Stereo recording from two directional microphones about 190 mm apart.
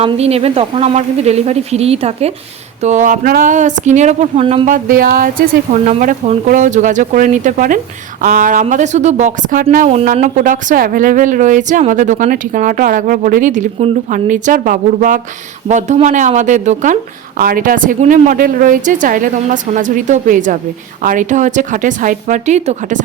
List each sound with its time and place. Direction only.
0.0 s speech: 30° right (ahead or behind)